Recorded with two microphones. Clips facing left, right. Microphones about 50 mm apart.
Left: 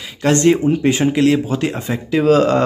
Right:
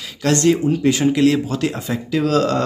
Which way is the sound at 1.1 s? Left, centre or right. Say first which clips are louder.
Left 1 dB; centre.